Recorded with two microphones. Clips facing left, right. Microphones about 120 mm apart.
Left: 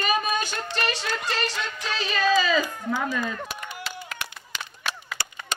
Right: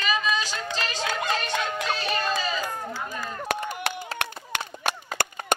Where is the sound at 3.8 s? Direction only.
65° right (ahead or behind); by 5.6 s 50° right (ahead or behind).